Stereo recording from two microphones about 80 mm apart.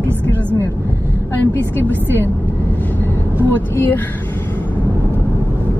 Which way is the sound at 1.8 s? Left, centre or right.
Left.